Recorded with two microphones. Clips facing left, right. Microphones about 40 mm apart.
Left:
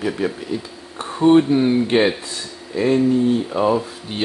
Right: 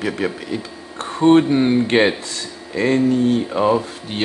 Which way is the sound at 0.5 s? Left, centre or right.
Right.